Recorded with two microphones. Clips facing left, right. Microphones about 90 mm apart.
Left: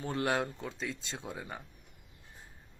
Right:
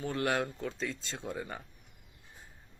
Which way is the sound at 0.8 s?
10° left (ahead or behind).